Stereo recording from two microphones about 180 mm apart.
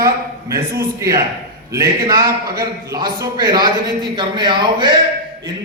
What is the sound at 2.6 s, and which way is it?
A man's voice, 20° right (ahead or behind).